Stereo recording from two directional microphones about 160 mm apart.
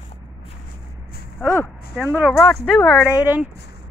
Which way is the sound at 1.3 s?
10° left (ahead or behind).